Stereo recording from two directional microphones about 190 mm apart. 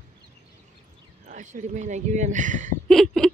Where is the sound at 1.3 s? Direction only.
40° right (ahead or behind).